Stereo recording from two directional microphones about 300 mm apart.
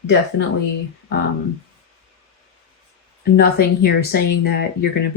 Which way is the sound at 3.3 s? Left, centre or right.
Left.